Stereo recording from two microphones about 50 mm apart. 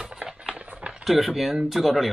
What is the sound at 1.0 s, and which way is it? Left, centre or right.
Speech, centre.